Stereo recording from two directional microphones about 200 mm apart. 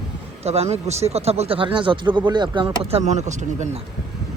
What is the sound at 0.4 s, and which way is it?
Speech, 30° right (ahead or behind).